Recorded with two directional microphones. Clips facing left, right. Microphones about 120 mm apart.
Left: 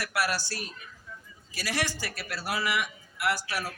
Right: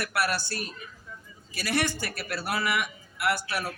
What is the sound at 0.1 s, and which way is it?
A man's voice, 55° right (ahead or behind).